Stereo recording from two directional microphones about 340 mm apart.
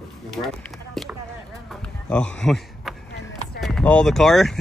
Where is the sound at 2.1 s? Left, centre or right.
Centre.